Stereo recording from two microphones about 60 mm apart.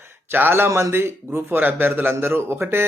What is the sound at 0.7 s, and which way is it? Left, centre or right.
Speech, right.